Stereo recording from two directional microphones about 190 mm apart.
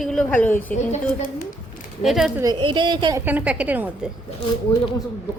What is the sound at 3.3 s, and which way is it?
Speech, 10° right (ahead or behind).